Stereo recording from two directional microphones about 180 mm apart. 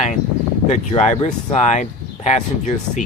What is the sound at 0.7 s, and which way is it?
Speech, 40° left (ahead or behind).